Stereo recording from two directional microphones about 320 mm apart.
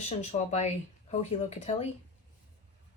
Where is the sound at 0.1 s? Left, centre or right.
Left.